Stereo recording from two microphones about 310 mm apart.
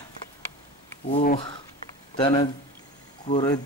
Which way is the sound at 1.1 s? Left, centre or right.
Left.